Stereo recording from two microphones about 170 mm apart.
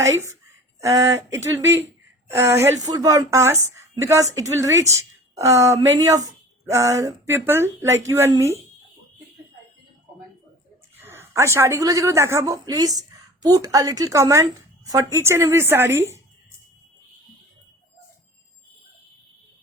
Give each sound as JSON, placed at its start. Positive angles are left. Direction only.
{"t": 0.0, "sound": "a woman's voice", "side_deg": -15}
{"t": 10.9, "sound": "a woman's voice", "side_deg": -15}